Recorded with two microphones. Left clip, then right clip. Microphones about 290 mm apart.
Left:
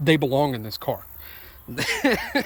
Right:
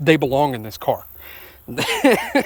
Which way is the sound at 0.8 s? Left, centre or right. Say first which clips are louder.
Right 9 dB; centre.